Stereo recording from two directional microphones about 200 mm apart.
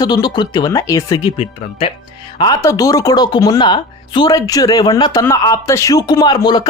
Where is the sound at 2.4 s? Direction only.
20° left (ahead or behind).